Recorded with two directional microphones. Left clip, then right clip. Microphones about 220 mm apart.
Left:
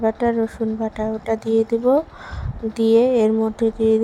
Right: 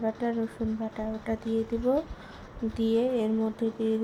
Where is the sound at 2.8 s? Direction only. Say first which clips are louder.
Left 12 dB; 30° left (ahead or behind).